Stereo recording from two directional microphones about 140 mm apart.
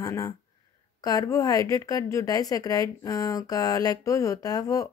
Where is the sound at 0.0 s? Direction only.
25° left (ahead or behind).